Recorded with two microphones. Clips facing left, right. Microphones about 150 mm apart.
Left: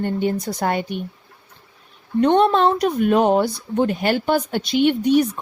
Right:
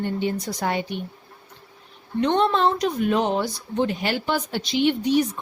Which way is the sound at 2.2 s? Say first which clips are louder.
Left 5 dB; 50° left (ahead or behind).